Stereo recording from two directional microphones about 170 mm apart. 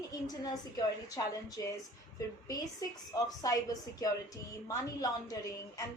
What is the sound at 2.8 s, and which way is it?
A woman's voice, 20° left (ahead or behind).